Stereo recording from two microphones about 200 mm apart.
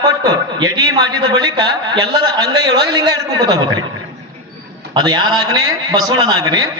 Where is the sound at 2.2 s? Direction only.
20° right (ahead or behind).